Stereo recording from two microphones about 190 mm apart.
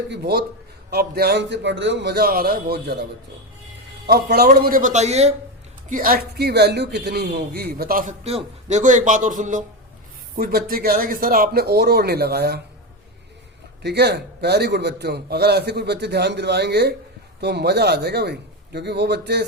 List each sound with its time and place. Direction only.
0.1 s a man's voice: 60° right (ahead or behind); by 5.3 s 35° right (ahead or behind)
5.9 s a man's voice: 50° right (ahead or behind)
8.2 s speech: 30° right (ahead or behind)
10.3 s a man's voice: 50° right (ahead or behind)
13.8 s a man's voice: 60° right (ahead or behind)